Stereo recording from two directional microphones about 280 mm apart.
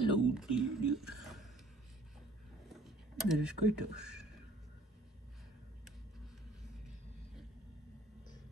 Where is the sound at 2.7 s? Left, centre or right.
Centre.